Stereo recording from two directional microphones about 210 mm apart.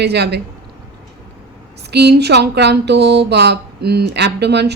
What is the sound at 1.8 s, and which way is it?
Speech, 50° right (ahead or behind).